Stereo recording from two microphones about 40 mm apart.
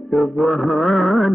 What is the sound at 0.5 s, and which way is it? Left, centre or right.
Music, centre.